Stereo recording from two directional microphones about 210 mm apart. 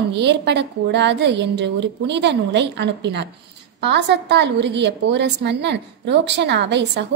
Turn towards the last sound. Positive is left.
turn(degrees=-55)  # may be behind; listen again after turning